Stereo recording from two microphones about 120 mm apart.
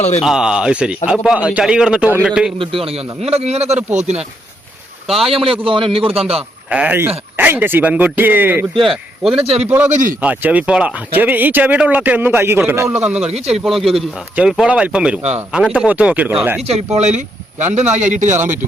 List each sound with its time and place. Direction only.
0.2 s speech: 5° right (ahead or behind)
2.8 s a man's voice: 55° right (ahead or behind)
5.0 s speech: centre (ahead or behind)
5.3 s a man's voice: 50° right (ahead or behind)
6.3 s a man's voice: 10° right (ahead or behind)
8.8 s speech: centre (ahead or behind)
9.3 s a man's voice: 55° right (ahead or behind)
9.6 s speech: 15° right (ahead or behind)
9.9 s a man's voice: 90° right
10.2 s speech: 10° right (ahead or behind)
13.3 s a man's voice: 60° right (ahead or behind)
13.7 s speech: centre (ahead or behind)
16.6 s a man's voice: 65° right (ahead or behind); by 18.3 s 90° right